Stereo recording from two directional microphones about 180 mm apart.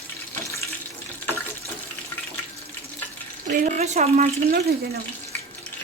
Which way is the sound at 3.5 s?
45° right (ahead or behind).